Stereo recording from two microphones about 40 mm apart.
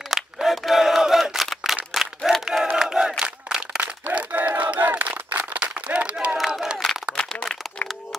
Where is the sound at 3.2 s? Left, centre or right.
Right.